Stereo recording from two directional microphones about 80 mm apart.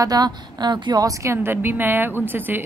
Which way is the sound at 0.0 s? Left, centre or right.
Right.